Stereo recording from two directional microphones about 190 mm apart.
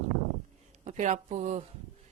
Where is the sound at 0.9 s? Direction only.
40° right (ahead or behind).